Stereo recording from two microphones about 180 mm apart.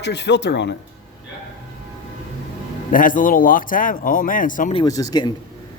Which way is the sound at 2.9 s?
50° left (ahead or behind).